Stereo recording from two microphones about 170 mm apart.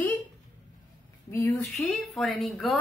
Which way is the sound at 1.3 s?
10° left (ahead or behind).